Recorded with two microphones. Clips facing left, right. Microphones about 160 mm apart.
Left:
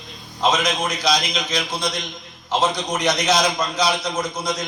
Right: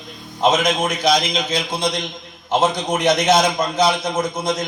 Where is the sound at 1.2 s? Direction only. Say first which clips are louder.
Right 3 dB; 25° right (ahead or behind).